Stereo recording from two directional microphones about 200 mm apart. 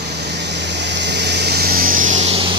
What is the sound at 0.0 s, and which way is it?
Vehicle, 55° right (ahead or behind).